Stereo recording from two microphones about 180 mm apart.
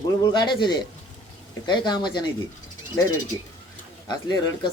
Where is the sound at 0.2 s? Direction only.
25° left (ahead or behind).